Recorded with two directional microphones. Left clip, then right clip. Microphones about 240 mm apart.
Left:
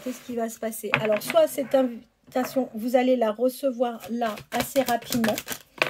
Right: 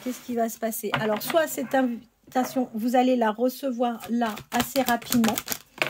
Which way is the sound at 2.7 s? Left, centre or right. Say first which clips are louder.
Even; right.